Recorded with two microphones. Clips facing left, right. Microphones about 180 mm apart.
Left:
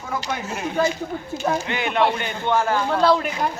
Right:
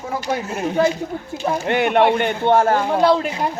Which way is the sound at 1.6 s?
55° right (ahead or behind).